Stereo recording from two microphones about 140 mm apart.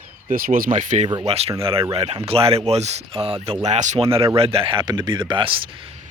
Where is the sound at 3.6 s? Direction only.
55° right (ahead or behind).